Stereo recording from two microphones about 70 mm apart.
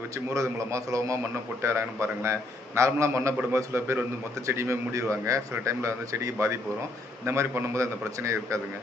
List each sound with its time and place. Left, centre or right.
0.3 s a man's voice: right
1.6 s a man's voice: right